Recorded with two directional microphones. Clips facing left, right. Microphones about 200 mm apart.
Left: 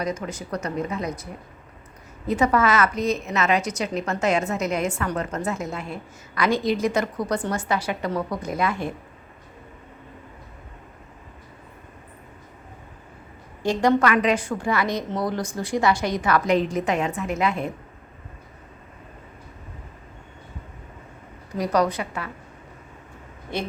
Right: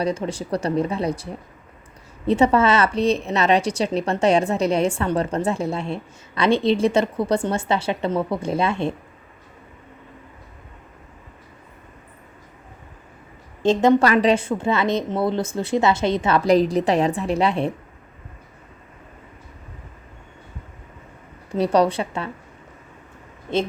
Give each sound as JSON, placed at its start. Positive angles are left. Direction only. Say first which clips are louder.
{"t": 0.0, "sound": "a woman's voice", "louder": "right 5 dB", "side_deg": -30}
{"t": 13.6, "sound": "a woman's voice", "louder": "right 4 dB", "side_deg": -20}
{"t": 14.0, "sound": "a woman's voice", "louder": "right 3 dB", "side_deg": -35}
{"t": 21.5, "sound": "a woman's voice", "louder": "right 4 dB", "side_deg": -30}
{"t": 23.5, "sound": "a woman's voice", "louder": "right 7 dB", "side_deg": -25}